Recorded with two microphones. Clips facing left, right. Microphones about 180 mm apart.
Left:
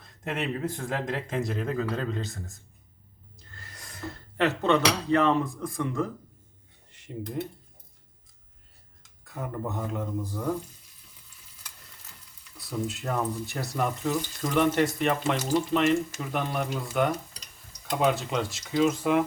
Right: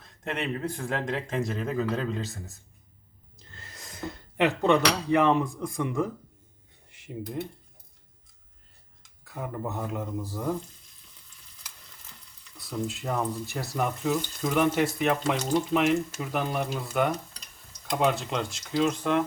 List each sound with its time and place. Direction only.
0.0 s speech: centre (ahead or behind)
3.3 s speech: 20° right (ahead or behind)
6.9 s speech: 5° right (ahead or behind)
9.2 s speech: centre (ahead or behind)
12.5 s speech: 5° left (ahead or behind)
15.7 s speech: 10° right (ahead or behind)